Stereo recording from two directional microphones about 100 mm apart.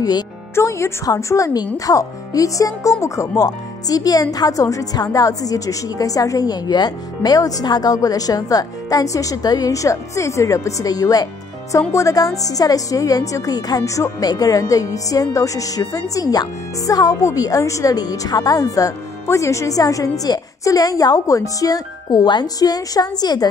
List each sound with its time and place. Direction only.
0.6 s a woman's voice: 30° left (ahead or behind)